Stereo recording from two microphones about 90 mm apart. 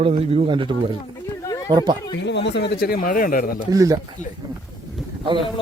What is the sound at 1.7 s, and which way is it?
Speech, 55° right (ahead or behind).